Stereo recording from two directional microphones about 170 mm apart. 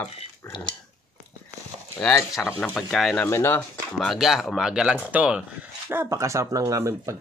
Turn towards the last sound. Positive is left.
turn(degrees=-20)  # may be behind; listen again after turning